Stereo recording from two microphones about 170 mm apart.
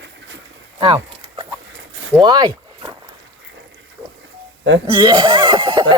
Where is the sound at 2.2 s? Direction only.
25° right (ahead or behind).